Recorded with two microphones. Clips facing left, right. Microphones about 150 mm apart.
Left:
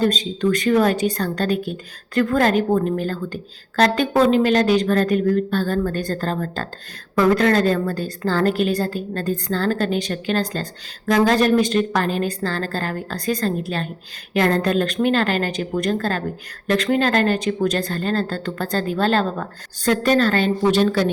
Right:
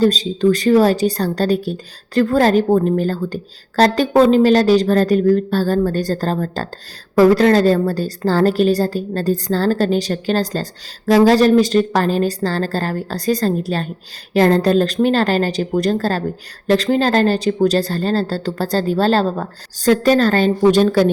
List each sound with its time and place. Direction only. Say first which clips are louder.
0.0 s speech: right 5 dB; 35° right (ahead or behind)